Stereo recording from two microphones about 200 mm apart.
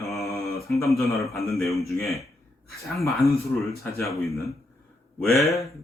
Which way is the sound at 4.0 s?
15° left (ahead or behind).